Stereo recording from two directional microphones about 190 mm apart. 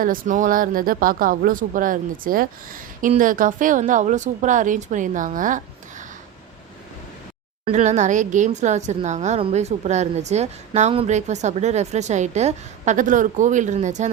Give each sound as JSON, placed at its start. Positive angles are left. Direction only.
{"t": 0.0, "sound": "a woman's voice", "side_deg": -45}
{"t": 7.6, "sound": "speech", "side_deg": -35}